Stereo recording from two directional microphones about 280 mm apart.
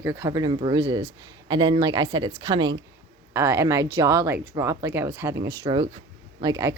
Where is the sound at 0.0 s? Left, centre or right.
Centre.